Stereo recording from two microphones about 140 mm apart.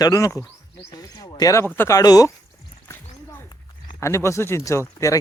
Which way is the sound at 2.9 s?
15° left (ahead or behind).